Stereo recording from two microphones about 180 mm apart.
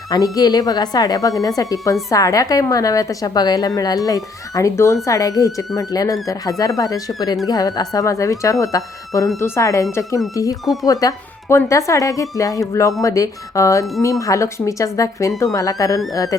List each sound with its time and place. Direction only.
0.1 s a woman's voice: 20° left (ahead or behind)